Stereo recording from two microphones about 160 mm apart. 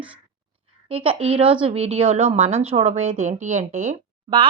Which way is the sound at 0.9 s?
35° right (ahead or behind).